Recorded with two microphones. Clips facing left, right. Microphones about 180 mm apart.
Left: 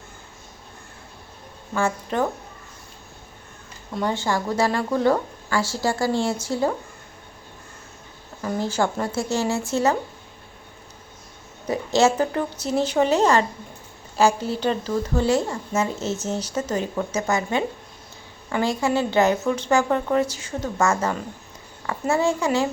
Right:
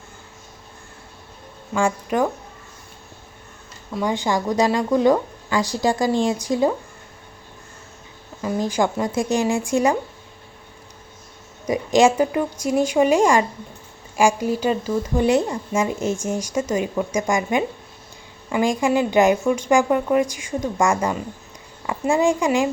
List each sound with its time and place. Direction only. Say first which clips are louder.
1.7 s speech: right 3 dB; 10° right (ahead or behind)
3.9 s speech: right 2 dB; 15° right (ahead or behind)
8.4 s speech: right 2 dB; 15° right (ahead or behind)
11.6 s speech: right 3 dB; 15° right (ahead or behind)